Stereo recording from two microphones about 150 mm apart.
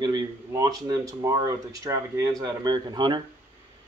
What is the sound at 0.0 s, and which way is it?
Speech, 25° right (ahead or behind).